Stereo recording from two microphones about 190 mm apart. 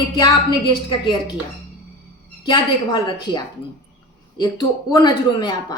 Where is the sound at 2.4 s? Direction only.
25° left (ahead or behind).